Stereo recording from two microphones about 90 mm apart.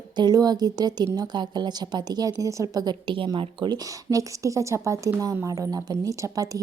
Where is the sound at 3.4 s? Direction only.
60° right (ahead or behind).